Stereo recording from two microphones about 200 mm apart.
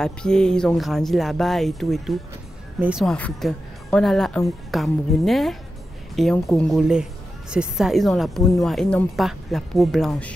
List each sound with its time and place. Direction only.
0.0 s a woman's voice: 5° left (ahead or behind)